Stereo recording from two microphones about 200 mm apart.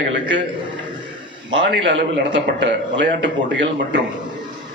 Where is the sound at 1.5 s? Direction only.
65° right (ahead or behind).